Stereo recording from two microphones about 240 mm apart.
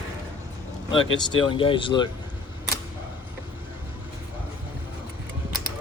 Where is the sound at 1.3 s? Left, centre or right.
Left.